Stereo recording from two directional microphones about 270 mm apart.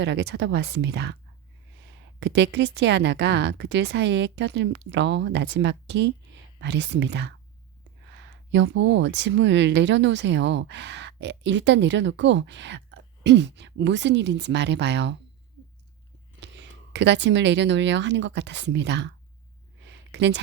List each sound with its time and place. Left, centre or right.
0.0 s speech: right
16.4 s speech: right
20.1 s a sound: right